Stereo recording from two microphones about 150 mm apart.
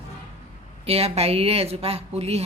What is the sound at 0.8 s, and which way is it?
A woman's voice, 45° right (ahead or behind).